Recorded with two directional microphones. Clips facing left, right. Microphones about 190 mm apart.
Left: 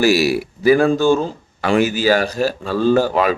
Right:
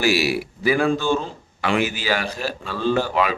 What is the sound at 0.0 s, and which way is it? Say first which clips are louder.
Speech: left 5 dB; 40° left (ahead or behind).